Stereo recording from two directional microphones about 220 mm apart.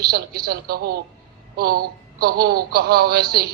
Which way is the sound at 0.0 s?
45° right (ahead or behind).